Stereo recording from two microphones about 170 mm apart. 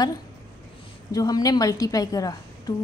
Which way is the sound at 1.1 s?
20° left (ahead or behind).